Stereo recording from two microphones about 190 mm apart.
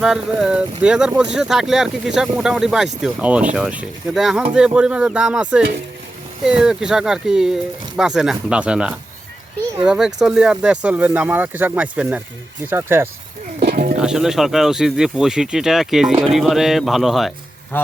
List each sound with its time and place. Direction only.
0.0 s speech: 5° right (ahead or behind)
13.6 s speech: 55° right (ahead or behind)
14.0 s a man's voice: 5° right (ahead or behind)